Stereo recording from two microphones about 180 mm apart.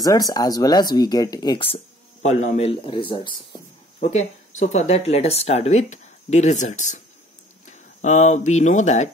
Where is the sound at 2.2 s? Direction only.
40° left (ahead or behind).